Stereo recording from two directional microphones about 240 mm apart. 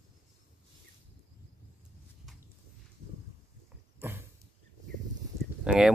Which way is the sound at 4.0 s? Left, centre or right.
Centre.